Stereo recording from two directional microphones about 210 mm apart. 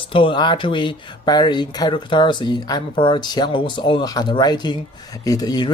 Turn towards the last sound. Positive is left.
turn(degrees=20)  # may be behind; listen again after turning